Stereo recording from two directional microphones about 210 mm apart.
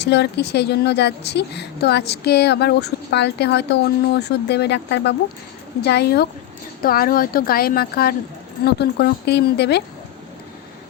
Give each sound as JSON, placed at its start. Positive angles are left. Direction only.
{"t": 0.0, "sound": "a woman's voice", "side_deg": 55}